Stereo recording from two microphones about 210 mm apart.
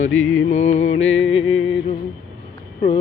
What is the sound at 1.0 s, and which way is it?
Music, 70° left (ahead or behind).